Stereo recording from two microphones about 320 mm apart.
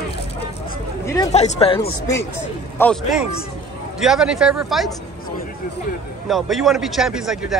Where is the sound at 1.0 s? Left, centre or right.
Centre.